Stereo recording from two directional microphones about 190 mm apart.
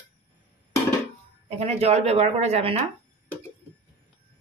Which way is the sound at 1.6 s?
35° right (ahead or behind).